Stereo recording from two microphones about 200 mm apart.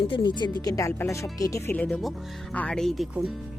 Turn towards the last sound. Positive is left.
turn(degrees=0)  # may be behind; listen again after turning